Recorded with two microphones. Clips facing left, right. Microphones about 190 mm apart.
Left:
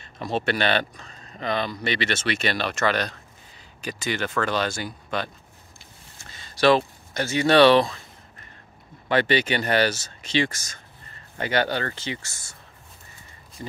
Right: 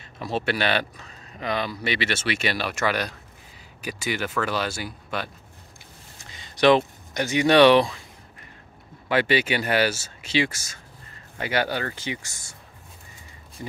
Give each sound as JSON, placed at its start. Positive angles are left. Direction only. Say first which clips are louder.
{"t": 0.0, "sound": "speech", "louder": "left 1 dB", "side_deg": -5}
{"t": 6.3, "sound": "speech", "louder": "right 1 dB", "side_deg": -20}
{"t": 9.1, "sound": "speech", "louder": "even", "side_deg": -5}
{"t": 13.6, "sound": "speech", "louder": "even", "side_deg": -15}